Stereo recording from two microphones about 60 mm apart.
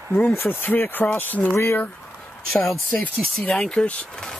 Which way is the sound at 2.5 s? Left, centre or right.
Centre.